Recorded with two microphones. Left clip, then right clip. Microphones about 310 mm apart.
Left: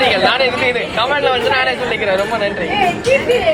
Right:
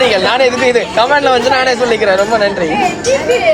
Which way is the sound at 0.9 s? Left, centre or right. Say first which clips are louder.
Right 4 dB; right.